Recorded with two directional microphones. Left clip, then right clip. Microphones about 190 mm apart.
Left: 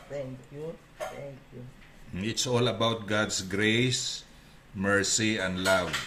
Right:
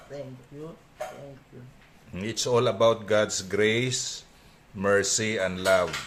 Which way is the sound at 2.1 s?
35° right (ahead or behind).